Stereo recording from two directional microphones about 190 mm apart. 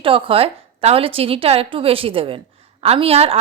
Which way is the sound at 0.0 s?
30° right (ahead or behind).